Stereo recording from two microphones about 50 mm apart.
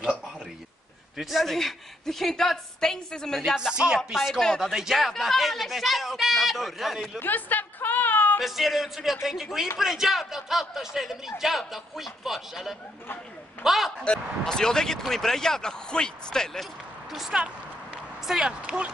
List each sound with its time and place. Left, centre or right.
1.1 s speech: centre
3.5 s a woman's voice: centre
4.1 s speech: centre
7.2 s a sound: left
8.4 s speech: centre
14.0 s speech: centre
17.3 s a woman's voice: centre